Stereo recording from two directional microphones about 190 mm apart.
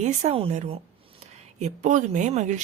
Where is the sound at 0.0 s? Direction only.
40° right (ahead or behind).